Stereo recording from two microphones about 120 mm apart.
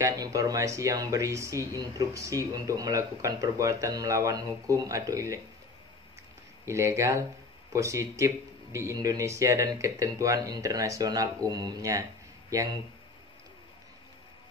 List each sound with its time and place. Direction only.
0.0 s speech: 30° right (ahead or behind)
6.6 s speech: 25° right (ahead or behind)